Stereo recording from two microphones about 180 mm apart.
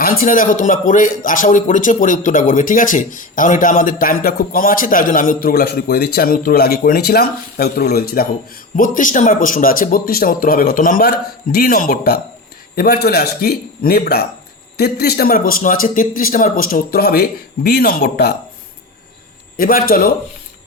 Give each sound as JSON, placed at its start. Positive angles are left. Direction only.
{"t": 0.0, "sound": "a man's voice", "side_deg": 55}
{"t": 19.5, "sound": "speech", "side_deg": 55}